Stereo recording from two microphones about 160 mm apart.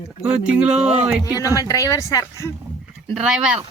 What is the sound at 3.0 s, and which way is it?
Speech, 5° right (ahead or behind).